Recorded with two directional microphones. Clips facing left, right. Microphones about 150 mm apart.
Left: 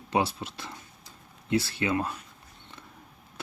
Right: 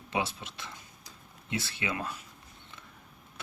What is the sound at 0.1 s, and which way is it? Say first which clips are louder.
Speech: left 6 dB; 35° left (ahead or behind).